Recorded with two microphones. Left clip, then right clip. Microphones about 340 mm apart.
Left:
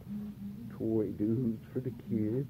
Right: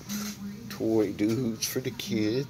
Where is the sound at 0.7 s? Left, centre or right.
Right.